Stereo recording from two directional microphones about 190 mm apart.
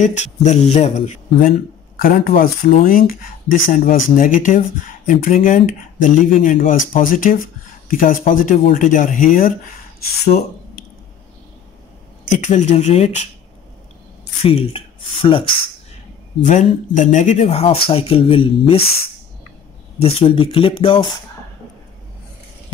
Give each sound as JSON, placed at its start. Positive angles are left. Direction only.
{"t": 0.0, "sound": "speech", "side_deg": 40}
{"t": 2.0, "sound": "speech", "side_deg": 50}
{"t": 12.3, "sound": "speech", "side_deg": 40}
{"t": 14.4, "sound": "speech", "side_deg": 30}
{"t": 16.4, "sound": "speech", "side_deg": 40}
{"t": 20.0, "sound": "speech", "side_deg": 30}